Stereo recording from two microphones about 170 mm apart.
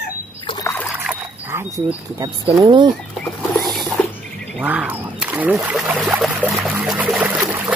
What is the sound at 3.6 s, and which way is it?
Rodents, centre (ahead or behind).